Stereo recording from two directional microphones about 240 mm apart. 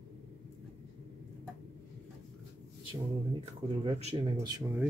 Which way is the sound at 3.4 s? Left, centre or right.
Right.